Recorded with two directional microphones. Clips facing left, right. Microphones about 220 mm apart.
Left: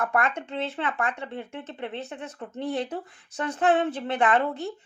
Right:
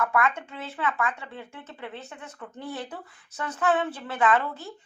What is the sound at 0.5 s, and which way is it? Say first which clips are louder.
Speech: left 2 dB; 30° left (ahead or behind).